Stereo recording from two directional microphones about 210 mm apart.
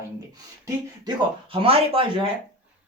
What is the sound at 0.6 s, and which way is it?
Speech, 20° right (ahead or behind).